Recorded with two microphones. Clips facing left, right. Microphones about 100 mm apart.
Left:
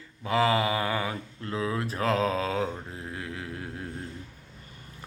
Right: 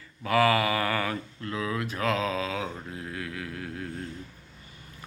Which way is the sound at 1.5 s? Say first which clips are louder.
Left 1 dB; 30° left (ahead or behind).